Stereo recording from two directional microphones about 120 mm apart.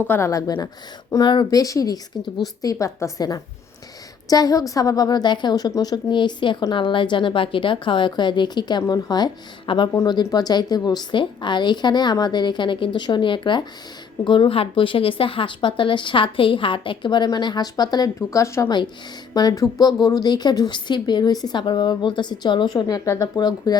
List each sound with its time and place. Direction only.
0.1 s a woman's voice: 25° left (ahead or behind)